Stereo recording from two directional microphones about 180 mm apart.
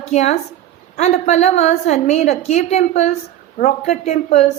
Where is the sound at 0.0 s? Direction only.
40° left (ahead or behind).